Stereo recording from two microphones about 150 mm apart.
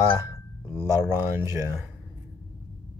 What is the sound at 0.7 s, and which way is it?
Speech, 20° right (ahead or behind).